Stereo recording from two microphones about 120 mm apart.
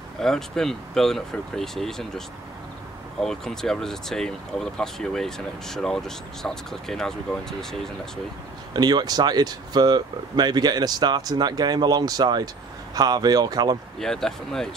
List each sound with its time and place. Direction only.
0.2 s speech: 5° left (ahead or behind)
8.7 s speech: 35° right (ahead or behind)
13.9 s speech: 5° left (ahead or behind)